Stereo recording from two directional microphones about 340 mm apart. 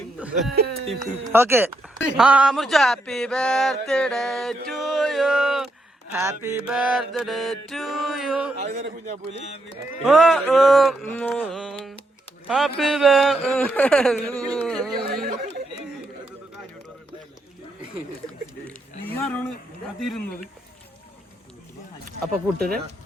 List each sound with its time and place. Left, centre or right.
0.2 s speech: centre
8.6 s a man's voice: right
10.0 s speech: centre
18.3 s a sound: centre
20.0 s speech: centre
22.5 s a man's voice: right